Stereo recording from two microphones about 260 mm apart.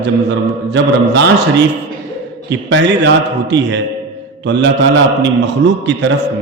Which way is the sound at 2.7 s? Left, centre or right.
Right.